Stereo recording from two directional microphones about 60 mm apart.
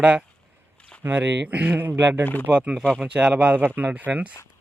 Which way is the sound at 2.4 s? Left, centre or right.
Right.